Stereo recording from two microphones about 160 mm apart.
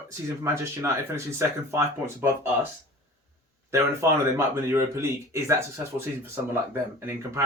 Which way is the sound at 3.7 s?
15° right (ahead or behind).